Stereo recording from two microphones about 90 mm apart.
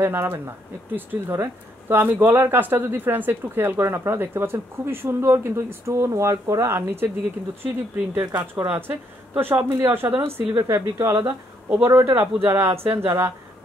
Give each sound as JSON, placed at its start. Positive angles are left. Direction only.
{"t": 0.0, "sound": "speech", "side_deg": -25}